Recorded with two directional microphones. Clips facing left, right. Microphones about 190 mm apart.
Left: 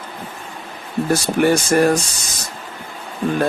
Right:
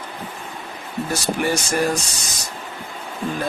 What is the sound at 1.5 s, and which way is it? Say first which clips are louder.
Speech: left 8 dB; 55° left (ahead or behind).